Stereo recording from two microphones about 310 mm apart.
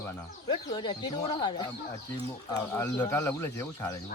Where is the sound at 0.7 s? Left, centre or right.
Centre.